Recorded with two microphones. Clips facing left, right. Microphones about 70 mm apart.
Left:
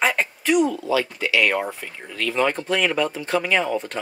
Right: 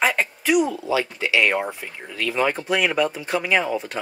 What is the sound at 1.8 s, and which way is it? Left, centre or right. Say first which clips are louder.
Speech: even; centre.